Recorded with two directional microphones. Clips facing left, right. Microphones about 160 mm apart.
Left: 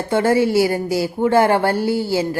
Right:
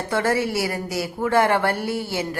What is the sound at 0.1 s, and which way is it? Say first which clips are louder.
A woman's voice: left 7 dB; 25° left (ahead or behind).